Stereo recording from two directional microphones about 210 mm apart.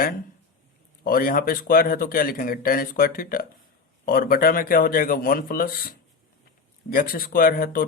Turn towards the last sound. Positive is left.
turn(degrees=45)  # may be behind; listen again after turning